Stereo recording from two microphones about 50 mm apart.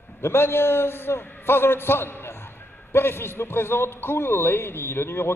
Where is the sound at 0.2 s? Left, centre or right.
Left.